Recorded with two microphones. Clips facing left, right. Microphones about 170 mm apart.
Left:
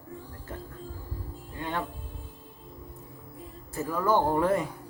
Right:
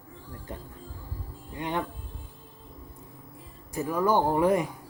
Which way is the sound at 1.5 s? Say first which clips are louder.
Right 2 dB; 20° right (ahead or behind).